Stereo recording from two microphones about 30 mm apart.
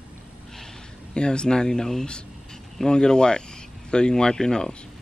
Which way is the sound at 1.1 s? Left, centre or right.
Left.